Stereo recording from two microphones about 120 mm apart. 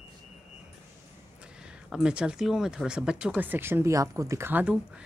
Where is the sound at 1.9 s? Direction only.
5° right (ahead or behind).